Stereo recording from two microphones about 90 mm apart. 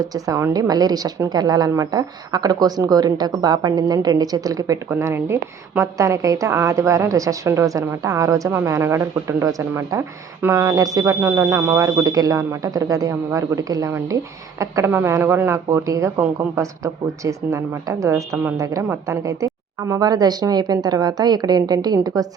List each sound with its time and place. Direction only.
0.0 s a woman's voice: 45° right (ahead or behind)
14.8 s a woman's voice: 30° right (ahead or behind)
19.9 s speech: 45° right (ahead or behind)